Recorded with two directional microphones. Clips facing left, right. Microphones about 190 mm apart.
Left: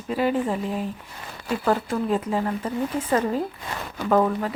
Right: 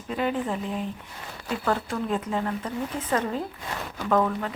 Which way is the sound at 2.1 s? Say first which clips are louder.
Left 3 dB; 10° left (ahead or behind).